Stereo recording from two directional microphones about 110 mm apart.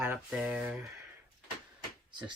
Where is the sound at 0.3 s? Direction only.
10° right (ahead or behind).